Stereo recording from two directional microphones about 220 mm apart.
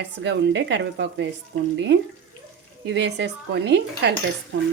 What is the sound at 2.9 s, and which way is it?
Speech, 50° right (ahead or behind).